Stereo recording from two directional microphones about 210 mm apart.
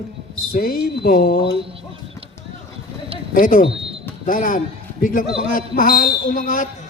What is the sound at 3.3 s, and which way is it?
A man's voice, 40° left (ahead or behind).